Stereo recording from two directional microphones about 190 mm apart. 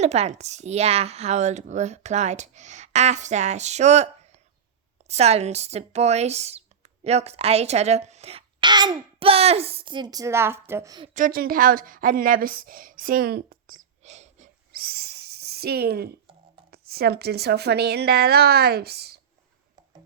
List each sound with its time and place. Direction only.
0.0 s a child's voice: 35° right (ahead or behind)
11.1 s a woman's voice: 45° right (ahead or behind)